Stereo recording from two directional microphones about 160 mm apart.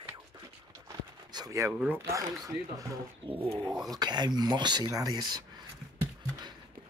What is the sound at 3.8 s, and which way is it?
Speech, 25° right (ahead or behind).